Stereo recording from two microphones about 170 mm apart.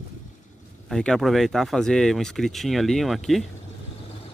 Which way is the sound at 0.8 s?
5° left (ahead or behind).